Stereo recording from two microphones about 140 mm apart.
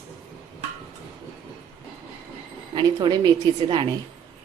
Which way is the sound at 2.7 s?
30° right (ahead or behind).